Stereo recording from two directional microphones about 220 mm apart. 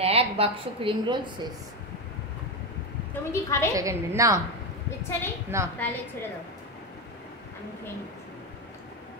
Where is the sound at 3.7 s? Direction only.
15° right (ahead or behind).